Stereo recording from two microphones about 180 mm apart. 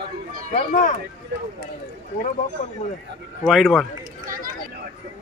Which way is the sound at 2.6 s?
45° left (ahead or behind).